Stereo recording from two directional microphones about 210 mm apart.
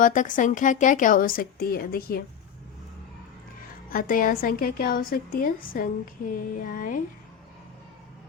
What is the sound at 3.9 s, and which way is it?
A woman's voice, 40° left (ahead or behind).